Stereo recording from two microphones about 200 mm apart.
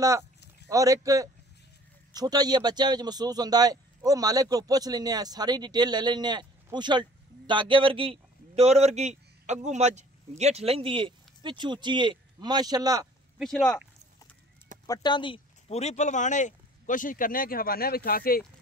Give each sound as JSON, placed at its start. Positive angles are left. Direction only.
{"t": 0.0, "sound": "a man's voice", "side_deg": -15}
{"t": 13.4, "sound": "speech", "side_deg": 5}
{"t": 14.9, "sound": "speech", "side_deg": 20}